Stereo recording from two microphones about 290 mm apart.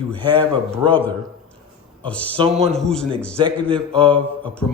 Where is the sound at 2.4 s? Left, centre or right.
Right.